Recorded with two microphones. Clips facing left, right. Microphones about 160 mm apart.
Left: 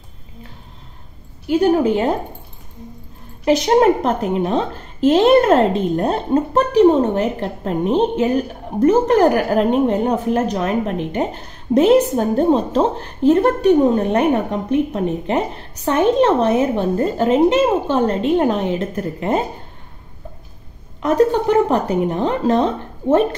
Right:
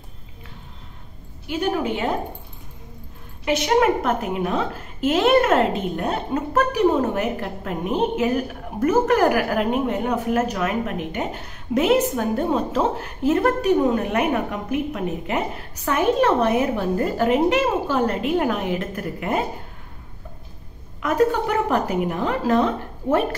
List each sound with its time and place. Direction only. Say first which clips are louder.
1.5 s a woman's voice: left 8 dB; 35° left (ahead or behind)
3.4 s a woman's voice: left 5 dB; 35° left (ahead or behind)
21.0 s a woman's voice: left 4 dB; 30° left (ahead or behind)